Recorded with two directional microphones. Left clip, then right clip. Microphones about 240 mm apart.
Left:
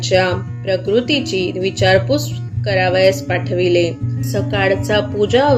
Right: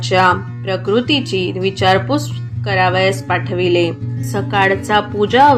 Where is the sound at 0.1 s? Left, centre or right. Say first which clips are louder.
Right 3 dB; right.